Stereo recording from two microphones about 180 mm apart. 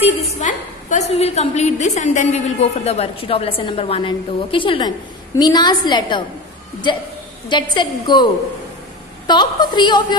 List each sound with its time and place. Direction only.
0.0 s a woman's voice: 40° left (ahead or behind)
7.4 s a woman's voice: 25° left (ahead or behind)
9.3 s a woman's voice: 25° left (ahead or behind)